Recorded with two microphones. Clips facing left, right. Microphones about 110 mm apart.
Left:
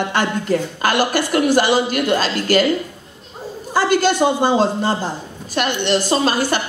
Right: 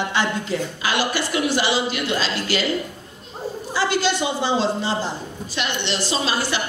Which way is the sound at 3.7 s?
50° left (ahead or behind).